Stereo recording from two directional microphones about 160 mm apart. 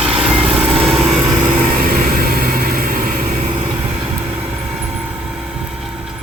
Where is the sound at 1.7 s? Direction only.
70° right (ahead or behind).